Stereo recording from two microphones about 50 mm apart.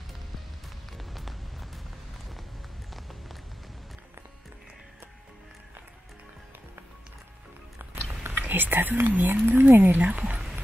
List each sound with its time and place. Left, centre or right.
0.9 s music: centre
8.3 s speech: right